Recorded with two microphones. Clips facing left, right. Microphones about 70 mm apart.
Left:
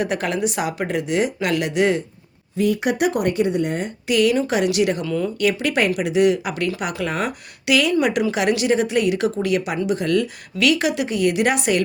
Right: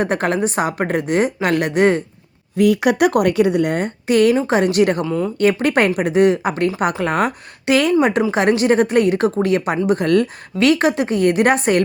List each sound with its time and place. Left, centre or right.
0.0 s a woman's voice: right
2.6 s a woman's voice: right
4.0 s speech: right
5.0 s speech: right
5.4 s speech: right